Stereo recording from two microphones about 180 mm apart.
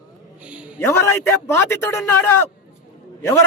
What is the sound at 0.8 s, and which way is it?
A man's voice, 15° left (ahead or behind).